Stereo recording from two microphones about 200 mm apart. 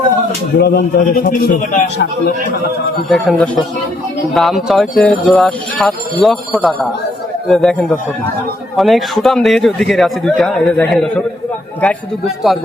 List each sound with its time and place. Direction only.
0.6 s a man's voice: 50° left (ahead or behind)
3.1 s a man's voice: centre (ahead or behind)